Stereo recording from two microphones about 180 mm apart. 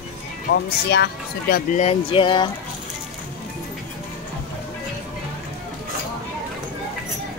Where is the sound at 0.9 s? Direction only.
65° left (ahead or behind).